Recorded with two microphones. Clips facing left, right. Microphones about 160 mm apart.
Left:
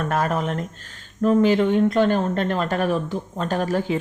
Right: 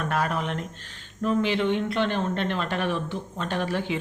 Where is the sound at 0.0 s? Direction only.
45° left (ahead or behind).